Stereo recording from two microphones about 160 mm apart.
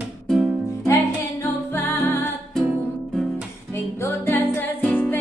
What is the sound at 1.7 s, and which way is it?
Music, 15° left (ahead or behind).